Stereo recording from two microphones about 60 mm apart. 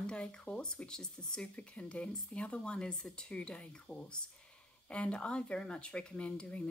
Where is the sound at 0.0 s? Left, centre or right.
Centre.